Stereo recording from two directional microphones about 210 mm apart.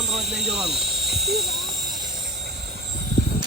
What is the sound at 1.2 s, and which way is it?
Speech, 50° right (ahead or behind).